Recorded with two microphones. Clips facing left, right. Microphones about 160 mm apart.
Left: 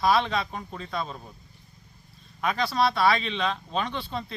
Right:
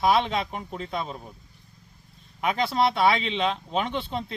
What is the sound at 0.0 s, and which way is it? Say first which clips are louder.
Speech: right 1 dB; 20° right (ahead or behind).